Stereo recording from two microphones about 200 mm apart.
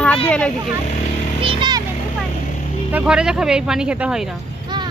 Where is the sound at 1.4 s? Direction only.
25° right (ahead or behind).